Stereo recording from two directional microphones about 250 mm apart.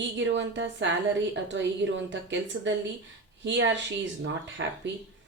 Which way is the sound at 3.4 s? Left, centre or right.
Right.